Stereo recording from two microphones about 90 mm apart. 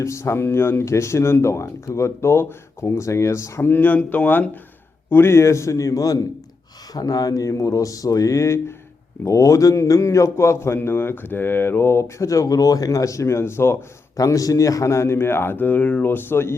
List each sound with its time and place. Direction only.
0.0 s a man's voice: 35° left (ahead or behind)
3.7 s a man's voice: 20° left (ahead or behind)
14.2 s a man's voice: 40° left (ahead or behind)